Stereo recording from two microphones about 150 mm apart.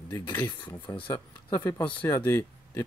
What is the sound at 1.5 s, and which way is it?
Speech, 10° left (ahead or behind).